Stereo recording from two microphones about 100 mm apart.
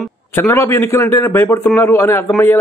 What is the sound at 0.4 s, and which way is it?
A man's voice, 25° left (ahead or behind).